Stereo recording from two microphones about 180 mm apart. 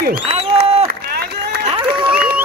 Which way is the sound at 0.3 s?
35° right (ahead or behind).